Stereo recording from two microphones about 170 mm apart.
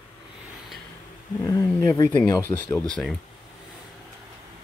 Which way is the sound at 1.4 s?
20° left (ahead or behind).